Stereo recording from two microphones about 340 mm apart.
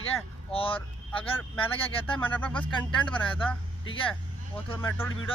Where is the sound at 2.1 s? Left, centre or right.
Centre.